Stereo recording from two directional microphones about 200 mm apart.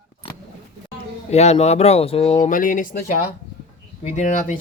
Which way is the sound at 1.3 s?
35° left (ahead or behind).